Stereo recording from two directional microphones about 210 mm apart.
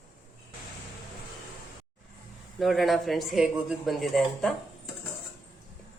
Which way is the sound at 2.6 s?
Centre (ahead or behind).